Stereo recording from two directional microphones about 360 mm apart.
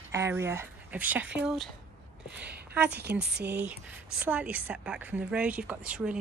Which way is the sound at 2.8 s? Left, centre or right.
Right.